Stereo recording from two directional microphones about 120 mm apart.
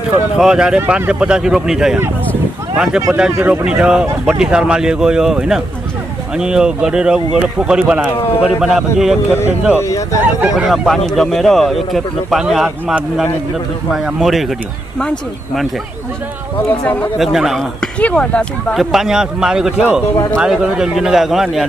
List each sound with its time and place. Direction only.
0.4 s speech: 5° right (ahead or behind)
3.1 s speech: 10° right (ahead or behind)
9.8 s speech: 25° left (ahead or behind)
10.2 s speech: 10° right (ahead or behind)
16.5 s speech: 15° left (ahead or behind)
17.2 s speech: centre (ahead or behind)
17.9 s speech: 10° left (ahead or behind)